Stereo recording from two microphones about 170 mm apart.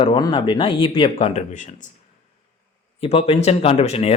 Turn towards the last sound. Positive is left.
turn(degrees=40)  # may be behind; listen again after turning